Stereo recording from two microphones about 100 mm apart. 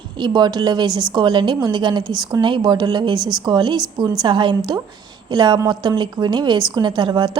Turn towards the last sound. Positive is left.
turn(degrees=-45)  # may be behind; listen again after turning